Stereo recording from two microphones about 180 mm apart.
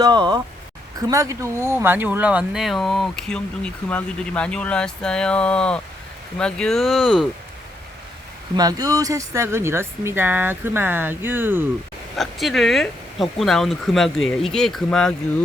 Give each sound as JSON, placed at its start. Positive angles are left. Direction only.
{"t": 0.0, "sound": "speech", "side_deg": -25}
{"t": 8.5, "sound": "speech", "side_deg": -20}
{"t": 12.1, "sound": "speech", "side_deg": 0}